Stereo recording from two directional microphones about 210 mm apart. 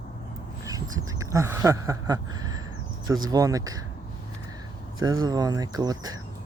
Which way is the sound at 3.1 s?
15° right (ahead or behind).